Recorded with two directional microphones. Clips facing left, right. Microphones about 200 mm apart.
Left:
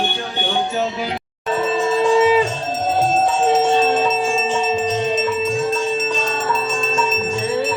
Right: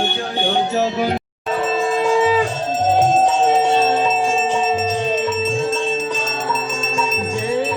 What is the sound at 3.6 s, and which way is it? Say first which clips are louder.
Music: even; 10° right (ahead or behind).